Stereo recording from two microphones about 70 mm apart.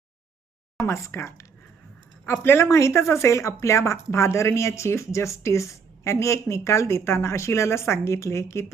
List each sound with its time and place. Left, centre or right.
0.9 s speech: left
2.2 s speech: left